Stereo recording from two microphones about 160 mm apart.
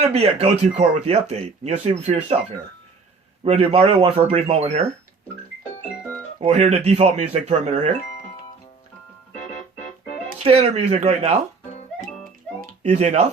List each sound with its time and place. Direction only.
0.0 s speech: 40° right (ahead or behind)
3.4 s speech: 35° right (ahead or behind)
6.4 s speech: 45° right (ahead or behind)
10.3 s speech: 40° right (ahead or behind)
11.9 s music: centre (ahead or behind)
12.8 s speech: 45° right (ahead or behind)